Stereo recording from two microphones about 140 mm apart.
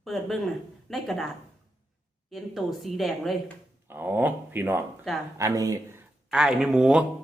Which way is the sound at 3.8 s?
15° right (ahead or behind).